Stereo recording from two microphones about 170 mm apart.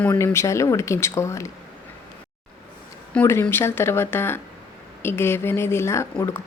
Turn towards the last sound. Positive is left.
turn(degrees=15)  # may be behind; listen again after turning